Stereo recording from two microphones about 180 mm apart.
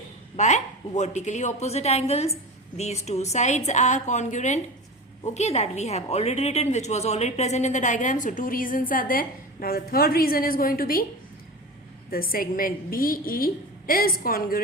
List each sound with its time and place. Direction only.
0.3 s a woman's voice: 40° left (ahead or behind)
12.1 s a woman's voice: 55° left (ahead or behind)